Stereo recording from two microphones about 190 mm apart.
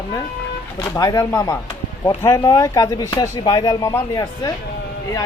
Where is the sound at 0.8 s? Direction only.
15° left (ahead or behind).